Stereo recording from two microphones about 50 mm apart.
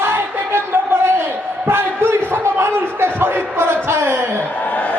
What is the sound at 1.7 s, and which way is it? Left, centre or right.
Speech, right.